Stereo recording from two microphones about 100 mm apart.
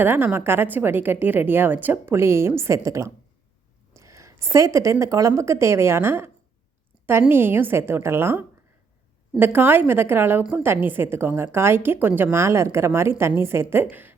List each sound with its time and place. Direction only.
0.0 s a woman's voice: 20° right (ahead or behind)